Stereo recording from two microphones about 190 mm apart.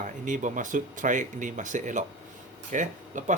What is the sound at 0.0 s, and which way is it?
Speech, 40° right (ahead or behind).